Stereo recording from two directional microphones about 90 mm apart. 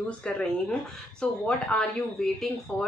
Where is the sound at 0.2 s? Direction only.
10° left (ahead or behind).